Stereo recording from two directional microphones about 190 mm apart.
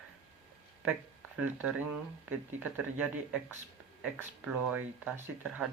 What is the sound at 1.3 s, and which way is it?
Speech, 5° right (ahead or behind).